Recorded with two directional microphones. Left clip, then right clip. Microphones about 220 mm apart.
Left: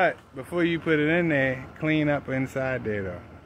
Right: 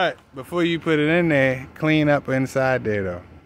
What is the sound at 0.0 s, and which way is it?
Speech, 25° right (ahead or behind).